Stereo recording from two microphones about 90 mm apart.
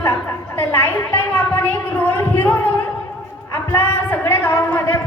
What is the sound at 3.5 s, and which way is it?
A woman's voice, 30° left (ahead or behind).